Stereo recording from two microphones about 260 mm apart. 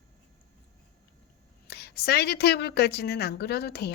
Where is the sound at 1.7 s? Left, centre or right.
Left.